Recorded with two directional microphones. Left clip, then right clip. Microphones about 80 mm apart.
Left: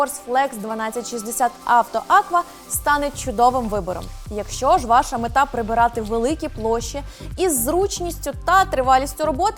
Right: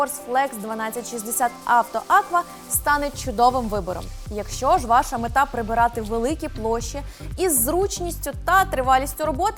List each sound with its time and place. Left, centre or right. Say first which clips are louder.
0.3 s a woman's voice: left 2 dB; centre
4.5 s speech: left 2 dB; centre